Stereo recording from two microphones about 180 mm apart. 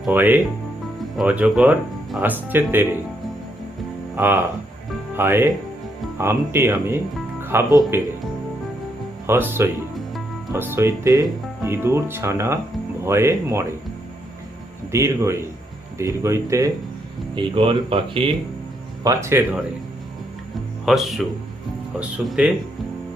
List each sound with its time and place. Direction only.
0.0 s speech: 10° right (ahead or behind)
4.1 s speech: 10° right (ahead or behind)
9.2 s speech: 15° right (ahead or behind)
14.9 s speech: 15° right (ahead or behind)
17.3 s speech: 30° right (ahead or behind)
19.0 s speech: 15° right (ahead or behind)
20.8 s speech: centre (ahead or behind)